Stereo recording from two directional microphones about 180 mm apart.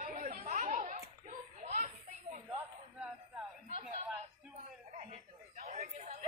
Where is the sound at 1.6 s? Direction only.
40° right (ahead or behind).